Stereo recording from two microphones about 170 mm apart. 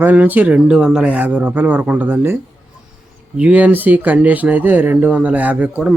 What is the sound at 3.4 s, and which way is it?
Speech, 10° right (ahead or behind).